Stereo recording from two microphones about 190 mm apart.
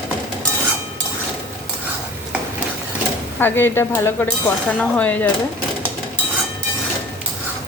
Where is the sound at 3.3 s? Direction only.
10° left (ahead or behind).